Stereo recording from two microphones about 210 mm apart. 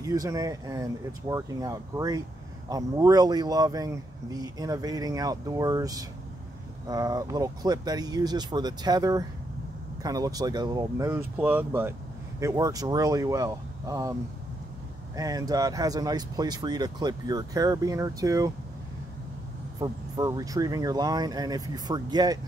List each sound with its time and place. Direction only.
0.0 s speech: 15° right (ahead or behind)
15.1 s speech: 15° right (ahead or behind)
19.8 s speech: 15° right (ahead or behind)